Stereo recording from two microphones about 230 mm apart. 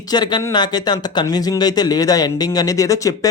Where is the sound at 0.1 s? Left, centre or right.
Centre.